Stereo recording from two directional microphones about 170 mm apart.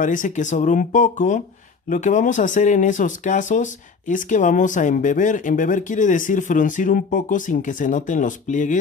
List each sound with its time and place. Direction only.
0.0 s speech: 50° left (ahead or behind)